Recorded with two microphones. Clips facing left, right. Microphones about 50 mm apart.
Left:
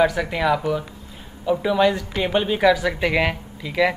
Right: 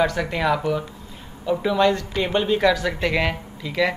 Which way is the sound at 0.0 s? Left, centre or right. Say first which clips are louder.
Left 2 dB; centre.